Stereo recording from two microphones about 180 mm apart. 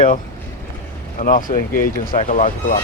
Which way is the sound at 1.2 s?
50° left (ahead or behind).